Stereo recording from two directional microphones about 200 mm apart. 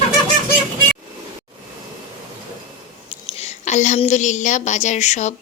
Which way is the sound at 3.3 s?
30° left (ahead or behind).